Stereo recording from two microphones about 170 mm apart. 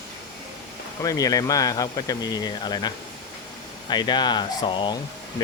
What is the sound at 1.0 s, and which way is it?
Speech, 20° left (ahead or behind).